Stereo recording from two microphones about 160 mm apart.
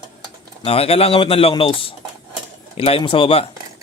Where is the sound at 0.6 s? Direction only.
35° left (ahead or behind).